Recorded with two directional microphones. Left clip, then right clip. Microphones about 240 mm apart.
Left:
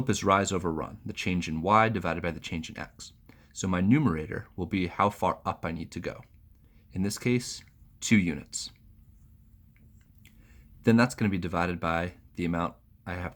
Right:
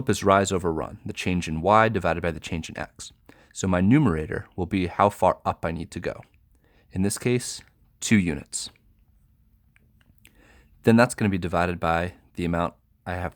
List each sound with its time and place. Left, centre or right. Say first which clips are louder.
0.0 s speech: right 5 dB; right
10.2 s speech: right 6 dB; right